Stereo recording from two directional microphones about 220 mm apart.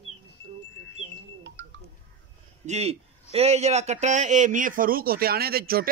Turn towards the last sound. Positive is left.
turn(degrees=-45)  # may be behind; listen again after turning